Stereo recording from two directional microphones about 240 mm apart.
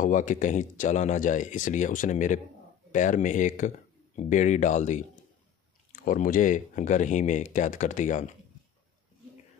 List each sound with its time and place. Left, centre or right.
0.0 s speech: left